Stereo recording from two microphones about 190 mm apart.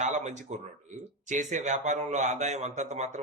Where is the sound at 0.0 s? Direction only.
40° right (ahead or behind).